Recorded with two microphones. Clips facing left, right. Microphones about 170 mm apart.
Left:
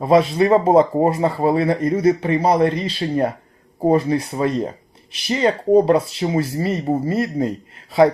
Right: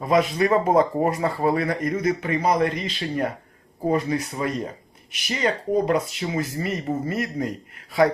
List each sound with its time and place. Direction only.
0.0 s speech: 30° left (ahead or behind)